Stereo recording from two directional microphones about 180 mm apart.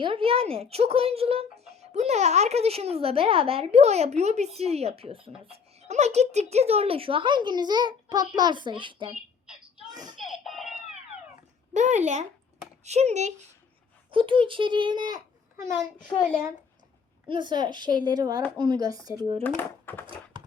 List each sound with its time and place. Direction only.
0.0 s a woman's voice: 30° right (ahead or behind)
9.9 s a sound: 20° right (ahead or behind)
10.2 s a sound: centre (ahead or behind)
11.7 s speech: 40° right (ahead or behind)
14.1 s a child's voice: 30° right (ahead or behind); by 16.6 s 15° right (ahead or behind)
17.2 s a woman's voice: 25° right (ahead or behind)
19.4 s speech: 10° left (ahead or behind)